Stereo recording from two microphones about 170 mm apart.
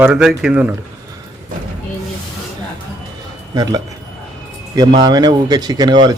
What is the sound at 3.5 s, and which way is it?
Speech, 25° right (ahead or behind).